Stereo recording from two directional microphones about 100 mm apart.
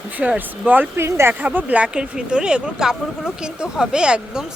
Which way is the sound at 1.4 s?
15° right (ahead or behind).